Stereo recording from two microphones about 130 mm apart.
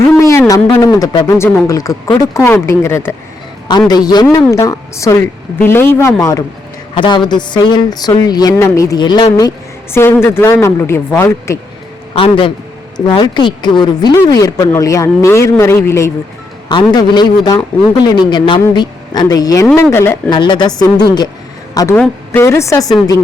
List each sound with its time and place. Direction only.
0.1 s speech: 20° left (ahead or behind)
3.7 s a woman's voice: 30° left (ahead or behind)
6.9 s a woman's voice: 40° left (ahead or behind)
9.9 s speech: 20° left (ahead or behind)
12.1 s a man's voice: 45° left (ahead or behind); by 16.1 s 20° left (ahead or behind)
16.9 s a woman's voice: 35° left (ahead or behind)
20.3 s a woman's voice: 35° left (ahead or behind)